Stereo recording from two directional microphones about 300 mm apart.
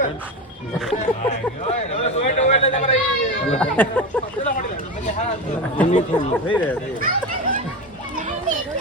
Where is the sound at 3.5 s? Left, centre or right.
Centre.